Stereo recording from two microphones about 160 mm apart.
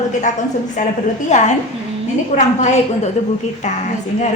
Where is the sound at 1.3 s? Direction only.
50° left (ahead or behind).